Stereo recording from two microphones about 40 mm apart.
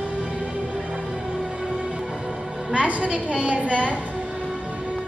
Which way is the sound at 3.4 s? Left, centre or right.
Right.